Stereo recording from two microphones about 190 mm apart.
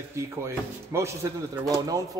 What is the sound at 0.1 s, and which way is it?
A man's voice, 15° right (ahead or behind).